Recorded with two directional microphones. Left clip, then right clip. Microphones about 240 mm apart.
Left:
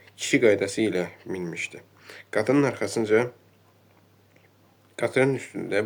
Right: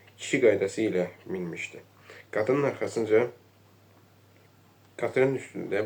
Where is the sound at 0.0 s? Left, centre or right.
Left.